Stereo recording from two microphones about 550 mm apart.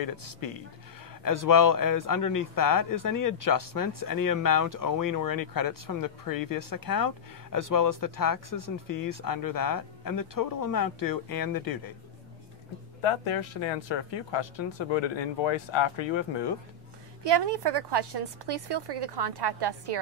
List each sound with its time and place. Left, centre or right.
0.0 s speech: left
13.0 s speech: left
17.3 s a woman's voice: right